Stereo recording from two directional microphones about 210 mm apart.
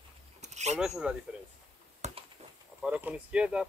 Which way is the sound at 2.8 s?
5° right (ahead or behind).